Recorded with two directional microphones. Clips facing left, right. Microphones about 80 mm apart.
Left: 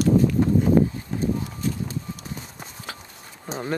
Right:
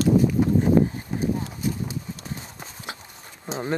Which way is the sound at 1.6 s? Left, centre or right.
Centre.